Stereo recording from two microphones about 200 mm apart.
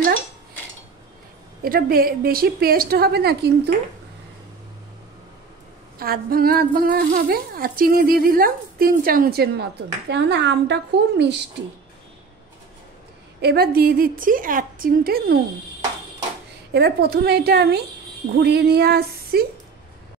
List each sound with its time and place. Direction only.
1.6 s a woman's voice: 50° right (ahead or behind)
5.9 s a woman's voice: 50° right (ahead or behind)
13.4 s a woman's voice: 55° right (ahead or behind)
16.7 s a woman's voice: 55° right (ahead or behind)